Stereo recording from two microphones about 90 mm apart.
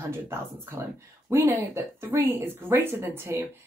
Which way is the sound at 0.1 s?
30° right (ahead or behind).